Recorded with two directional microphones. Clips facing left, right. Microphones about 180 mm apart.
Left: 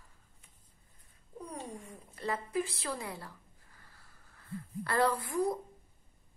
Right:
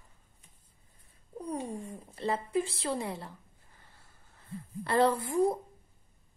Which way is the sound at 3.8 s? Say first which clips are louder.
Right 1 dB; 25° right (ahead or behind).